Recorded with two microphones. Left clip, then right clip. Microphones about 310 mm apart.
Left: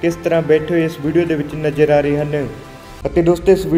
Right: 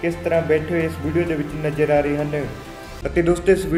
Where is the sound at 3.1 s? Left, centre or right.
Centre.